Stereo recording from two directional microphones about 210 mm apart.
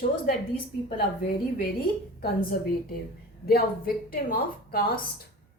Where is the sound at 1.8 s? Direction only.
45° left (ahead or behind).